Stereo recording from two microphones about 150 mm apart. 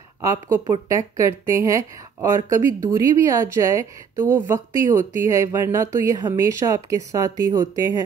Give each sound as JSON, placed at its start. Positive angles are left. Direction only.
{"t": 0.2, "sound": "speech", "side_deg": -20}